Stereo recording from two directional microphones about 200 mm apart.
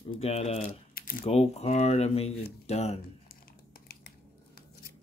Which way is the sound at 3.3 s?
45° left (ahead or behind).